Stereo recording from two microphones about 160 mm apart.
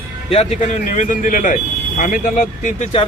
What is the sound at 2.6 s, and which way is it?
Speech, 50° left (ahead or behind).